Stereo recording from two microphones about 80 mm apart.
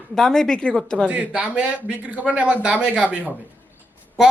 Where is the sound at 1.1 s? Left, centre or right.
Centre.